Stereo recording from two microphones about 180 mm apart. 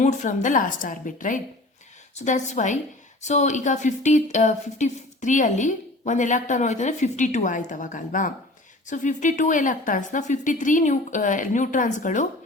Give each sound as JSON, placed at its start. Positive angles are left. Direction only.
{"t": 0.0, "sound": "speech", "side_deg": 45}